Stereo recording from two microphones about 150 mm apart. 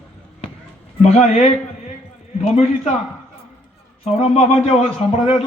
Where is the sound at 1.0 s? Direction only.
45° left (ahead or behind).